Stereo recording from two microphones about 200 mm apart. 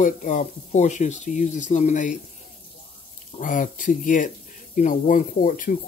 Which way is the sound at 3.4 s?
40° left (ahead or behind).